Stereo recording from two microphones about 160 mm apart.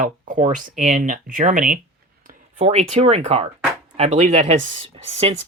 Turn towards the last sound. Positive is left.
turn(degrees=-40)  # may be behind; listen again after turning